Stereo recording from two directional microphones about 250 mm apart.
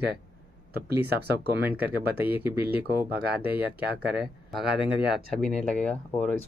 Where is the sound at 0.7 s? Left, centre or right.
Right.